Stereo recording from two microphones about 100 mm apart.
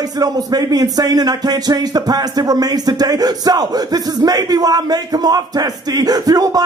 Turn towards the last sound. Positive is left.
turn(degrees=-40)  # may be behind; listen again after turning